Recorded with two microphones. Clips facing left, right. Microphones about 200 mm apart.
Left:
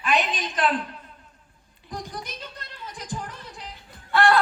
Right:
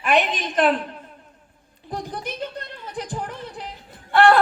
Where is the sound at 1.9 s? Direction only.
55° right (ahead or behind).